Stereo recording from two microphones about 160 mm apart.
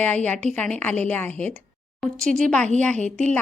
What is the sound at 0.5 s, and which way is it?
A woman's voice, 5° left (ahead or behind).